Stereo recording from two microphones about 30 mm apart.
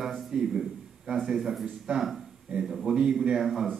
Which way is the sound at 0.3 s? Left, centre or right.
Centre.